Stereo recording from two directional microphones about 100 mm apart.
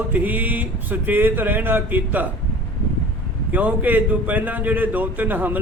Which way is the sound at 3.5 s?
15° right (ahead or behind).